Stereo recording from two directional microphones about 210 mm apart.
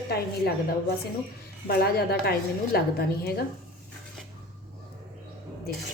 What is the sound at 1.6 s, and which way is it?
A woman's voice, 45° left (ahead or behind).